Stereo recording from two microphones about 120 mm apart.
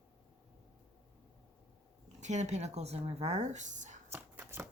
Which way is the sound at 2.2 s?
75° right (ahead or behind).